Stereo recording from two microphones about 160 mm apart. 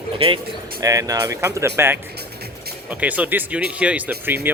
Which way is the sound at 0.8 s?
20° right (ahead or behind).